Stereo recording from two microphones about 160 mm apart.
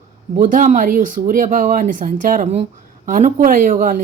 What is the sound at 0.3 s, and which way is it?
A woman's voice, 55° right (ahead or behind).